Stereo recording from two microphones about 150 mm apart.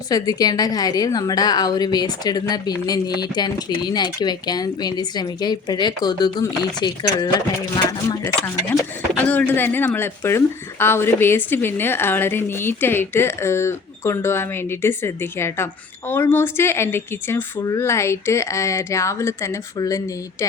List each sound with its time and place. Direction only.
0.1 s a woman's voice: 25° left (ahead or behind)
9.1 s speech: 10° left (ahead or behind)